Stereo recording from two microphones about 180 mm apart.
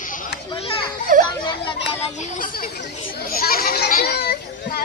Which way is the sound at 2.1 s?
40° left (ahead or behind).